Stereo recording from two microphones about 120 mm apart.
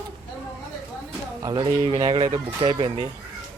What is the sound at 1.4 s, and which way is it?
Speech, 40° right (ahead or behind).